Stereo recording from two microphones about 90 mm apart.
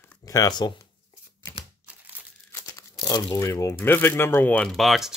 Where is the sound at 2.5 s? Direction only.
40° left (ahead or behind).